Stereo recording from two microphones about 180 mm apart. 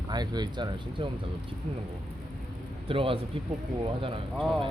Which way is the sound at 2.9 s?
30° right (ahead or behind).